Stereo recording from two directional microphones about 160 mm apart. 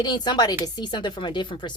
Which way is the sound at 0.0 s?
25° left (ahead or behind).